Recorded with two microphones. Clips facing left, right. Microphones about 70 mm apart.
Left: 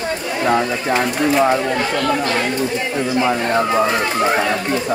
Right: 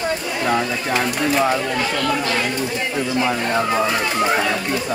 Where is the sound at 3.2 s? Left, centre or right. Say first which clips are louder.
Left 3 dB; centre.